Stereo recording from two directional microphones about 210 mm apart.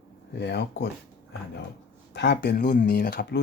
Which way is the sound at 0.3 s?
55° left (ahead or behind).